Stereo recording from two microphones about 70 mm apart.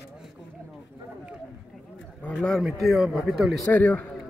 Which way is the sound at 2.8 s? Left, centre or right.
Centre.